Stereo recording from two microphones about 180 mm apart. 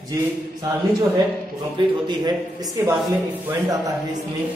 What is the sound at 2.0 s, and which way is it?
Speech, 20° right (ahead or behind).